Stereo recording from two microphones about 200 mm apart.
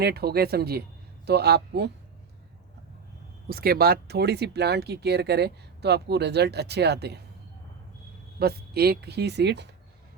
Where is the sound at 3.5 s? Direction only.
50° right (ahead or behind).